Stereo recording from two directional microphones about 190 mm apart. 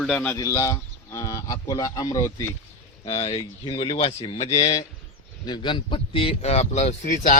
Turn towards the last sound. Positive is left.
turn(degrees=40)  # may be behind; listen again after turning